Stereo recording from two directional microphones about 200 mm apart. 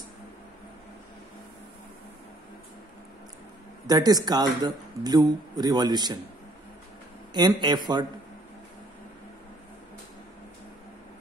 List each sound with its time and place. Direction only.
3.8 s speech: 20° right (ahead or behind)
7.3 s speech: 20° right (ahead or behind)